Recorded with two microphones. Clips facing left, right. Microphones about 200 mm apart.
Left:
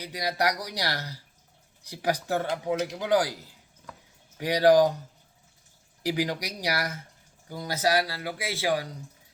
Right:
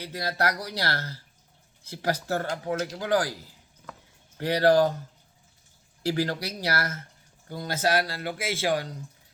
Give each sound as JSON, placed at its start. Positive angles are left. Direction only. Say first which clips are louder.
{"t": 0.0, "sound": "speech", "louder": "left 1 dB", "side_deg": 15}
{"t": 4.4, "sound": "speech", "louder": "left 1 dB", "side_deg": 15}
{"t": 6.0, "sound": "speech", "louder": "right 1 dB", "side_deg": 15}